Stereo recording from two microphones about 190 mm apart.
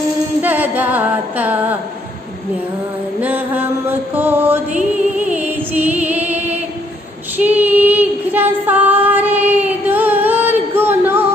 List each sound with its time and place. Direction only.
0.4 s music: 10° right (ahead or behind)
3.2 s music: 10° right (ahead or behind)
7.3 s child singing: 10° right (ahead or behind)